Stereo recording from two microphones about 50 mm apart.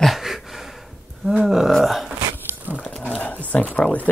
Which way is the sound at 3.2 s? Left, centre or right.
Left.